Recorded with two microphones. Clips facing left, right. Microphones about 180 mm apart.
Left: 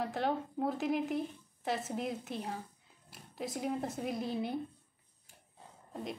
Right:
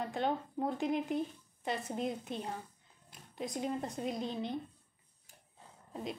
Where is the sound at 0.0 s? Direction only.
5° left (ahead or behind).